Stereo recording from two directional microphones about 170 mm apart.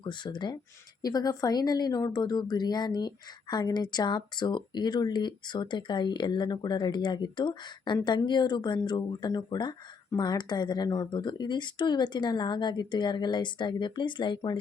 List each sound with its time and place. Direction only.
0.0 s speech: 25° left (ahead or behind)